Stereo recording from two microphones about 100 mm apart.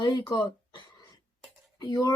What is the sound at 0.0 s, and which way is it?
Speech, 45° left (ahead or behind).